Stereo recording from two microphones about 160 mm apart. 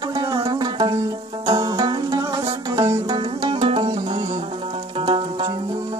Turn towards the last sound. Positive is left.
turn(degrees=-35)  # may be behind; listen again after turning